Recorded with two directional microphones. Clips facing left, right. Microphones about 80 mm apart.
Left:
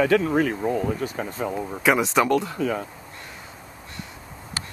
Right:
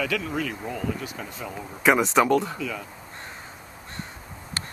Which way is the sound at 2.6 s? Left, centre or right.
Left.